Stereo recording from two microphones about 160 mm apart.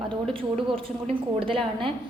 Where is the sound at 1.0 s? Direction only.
35° right (ahead or behind).